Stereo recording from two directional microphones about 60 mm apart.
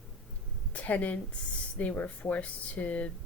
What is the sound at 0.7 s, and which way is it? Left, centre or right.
A woman's voice, left.